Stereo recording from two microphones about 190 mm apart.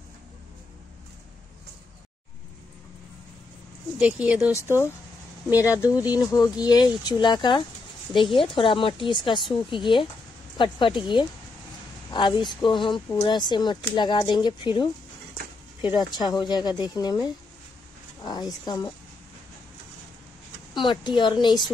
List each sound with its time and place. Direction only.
4.0 s speech: 5° right (ahead or behind)
4.6 s speech: 15° left (ahead or behind)
6.1 s speech: 20° left (ahead or behind)
16.2 s speech: 25° left (ahead or behind)
20.8 s speech: 25° left (ahead or behind)